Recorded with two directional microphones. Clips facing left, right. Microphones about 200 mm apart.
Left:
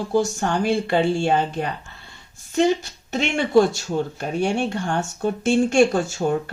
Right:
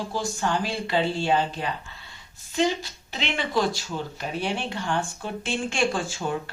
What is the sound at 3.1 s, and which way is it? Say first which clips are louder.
Speech: left 7 dB; 45° left (ahead or behind).